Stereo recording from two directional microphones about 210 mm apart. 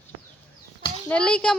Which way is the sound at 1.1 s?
5° left (ahead or behind).